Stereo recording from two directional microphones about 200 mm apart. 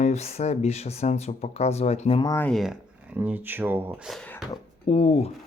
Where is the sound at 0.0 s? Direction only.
35° left (ahead or behind).